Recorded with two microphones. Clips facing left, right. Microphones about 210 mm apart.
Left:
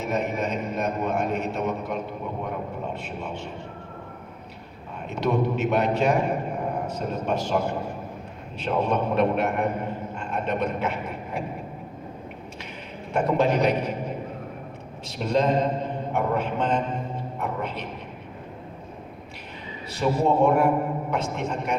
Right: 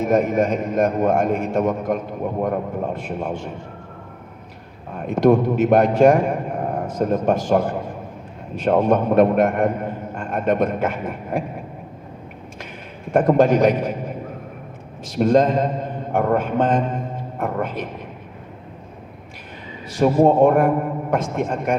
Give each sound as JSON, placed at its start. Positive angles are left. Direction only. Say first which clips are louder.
{"t": 0.0, "sound": "a man's voice", "louder": "right 9 dB", "side_deg": -50}
{"t": 4.9, "sound": "a man's voice", "louder": "right 10 dB", "side_deg": -50}
{"t": 8.9, "sound": "a man's voice", "louder": "right 6 dB", "side_deg": -50}
{"t": 13.1, "sound": "a man's voice", "louder": "right 7 dB", "side_deg": -50}
{"t": 15.0, "sound": "a man's voice", "louder": "right 7 dB", "side_deg": -50}
{"t": 20.0, "sound": "a man's voice", "louder": "right 7 dB", "side_deg": -50}